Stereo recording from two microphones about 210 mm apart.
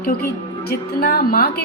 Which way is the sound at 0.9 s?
45° left (ahead or behind).